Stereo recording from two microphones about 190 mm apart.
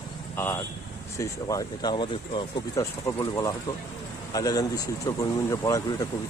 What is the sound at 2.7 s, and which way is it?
Speech, 15° left (ahead or behind).